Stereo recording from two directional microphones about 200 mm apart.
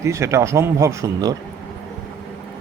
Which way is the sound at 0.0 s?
15° right (ahead or behind).